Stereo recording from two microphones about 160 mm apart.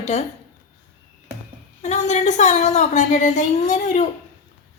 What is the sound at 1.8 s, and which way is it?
Speech, 45° left (ahead or behind).